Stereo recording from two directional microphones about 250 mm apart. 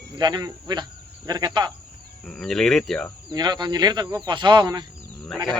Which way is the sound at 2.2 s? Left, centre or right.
Centre.